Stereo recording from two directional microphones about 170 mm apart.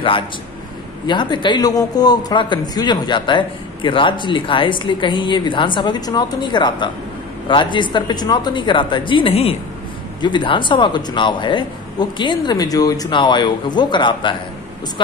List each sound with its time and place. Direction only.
1.0 s a man's voice: 25° left (ahead or behind)